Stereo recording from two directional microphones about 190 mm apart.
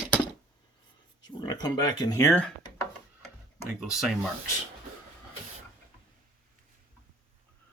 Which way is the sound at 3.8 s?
Centre (ahead or behind).